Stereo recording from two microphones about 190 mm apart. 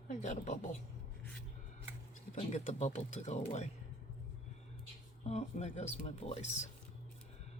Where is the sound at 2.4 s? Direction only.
35° left (ahead or behind).